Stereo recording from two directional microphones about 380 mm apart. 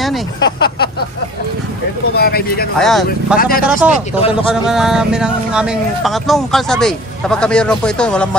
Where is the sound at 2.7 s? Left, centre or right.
Centre.